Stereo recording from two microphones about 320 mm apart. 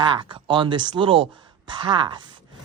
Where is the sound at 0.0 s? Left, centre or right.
Centre.